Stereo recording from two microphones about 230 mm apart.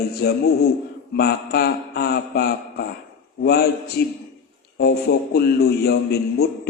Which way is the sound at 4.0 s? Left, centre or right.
Left.